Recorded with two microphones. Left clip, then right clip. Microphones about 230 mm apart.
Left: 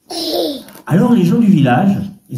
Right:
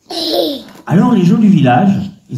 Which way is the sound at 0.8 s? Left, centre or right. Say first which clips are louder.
Right 1 dB; centre.